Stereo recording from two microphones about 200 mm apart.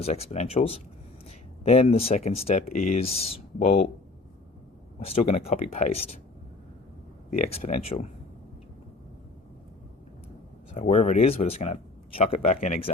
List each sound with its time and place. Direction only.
0.0 s speech: 30° left (ahead or behind)
4.9 s speech: 30° left (ahead or behind)
7.3 s speech: 35° left (ahead or behind)
10.8 s speech: 35° left (ahead or behind)